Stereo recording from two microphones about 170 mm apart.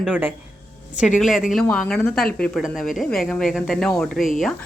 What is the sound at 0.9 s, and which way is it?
Speech, 45° left (ahead or behind).